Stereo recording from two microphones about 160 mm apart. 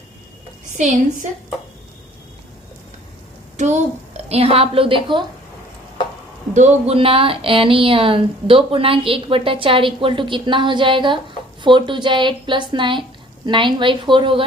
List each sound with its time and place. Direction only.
0.8 s a woman's voice: 50° right (ahead or behind)
4.3 s speech: 40° right (ahead or behind)
6.5 s speech: 45° right (ahead or behind)